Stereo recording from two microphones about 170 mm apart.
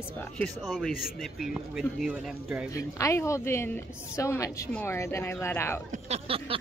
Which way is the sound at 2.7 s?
20° left (ahead or behind).